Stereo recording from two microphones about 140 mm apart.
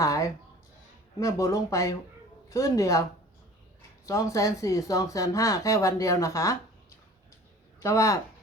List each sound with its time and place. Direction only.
0.0 s speech: 20° left (ahead or behind)
4.0 s speech: 25° left (ahead or behind)
7.8 s speech: 20° left (ahead or behind)